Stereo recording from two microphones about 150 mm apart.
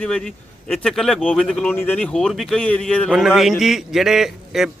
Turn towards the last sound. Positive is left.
turn(degrees=0)  # may be behind; listen again after turning